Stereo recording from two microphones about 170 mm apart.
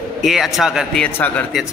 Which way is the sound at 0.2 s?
Centre (ahead or behind).